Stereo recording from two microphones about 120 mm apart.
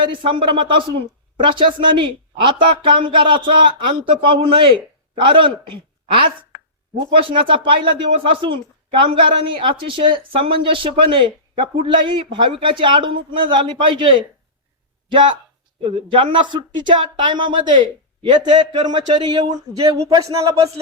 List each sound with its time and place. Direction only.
0.0 s speech: 45° right (ahead or behind)
7.1 s speech: 45° right (ahead or behind)
15.8 s speech: 45° right (ahead or behind); by 20.7 s 30° right (ahead or behind)